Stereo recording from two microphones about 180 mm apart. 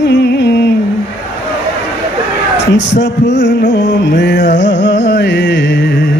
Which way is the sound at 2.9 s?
75° left (ahead or behind).